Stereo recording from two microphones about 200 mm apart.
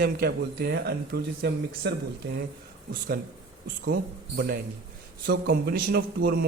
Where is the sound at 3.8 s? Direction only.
60° right (ahead or behind).